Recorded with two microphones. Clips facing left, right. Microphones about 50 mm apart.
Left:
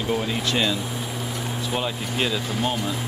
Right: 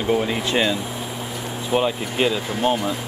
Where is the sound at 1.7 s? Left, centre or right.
Centre.